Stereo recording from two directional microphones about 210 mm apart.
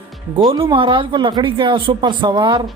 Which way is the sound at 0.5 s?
25° right (ahead or behind).